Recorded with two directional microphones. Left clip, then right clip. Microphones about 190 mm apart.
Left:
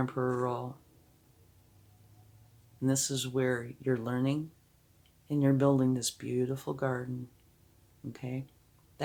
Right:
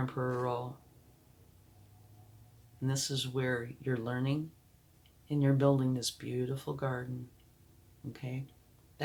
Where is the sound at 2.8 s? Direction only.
50° left (ahead or behind).